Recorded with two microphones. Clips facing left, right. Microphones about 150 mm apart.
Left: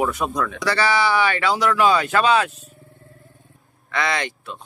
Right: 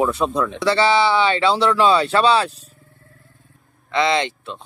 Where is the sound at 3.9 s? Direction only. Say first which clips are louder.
Right 5 dB; 25° right (ahead or behind).